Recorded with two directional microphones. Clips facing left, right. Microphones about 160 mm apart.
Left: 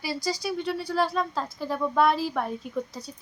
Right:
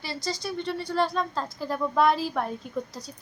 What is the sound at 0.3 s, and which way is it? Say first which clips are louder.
Speech: left 1 dB; 5° left (ahead or behind).